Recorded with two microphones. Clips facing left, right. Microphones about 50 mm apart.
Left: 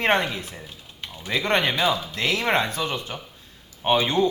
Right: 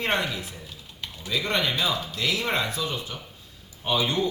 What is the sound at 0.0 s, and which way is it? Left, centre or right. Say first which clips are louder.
A man's voice: left 4 dB; left.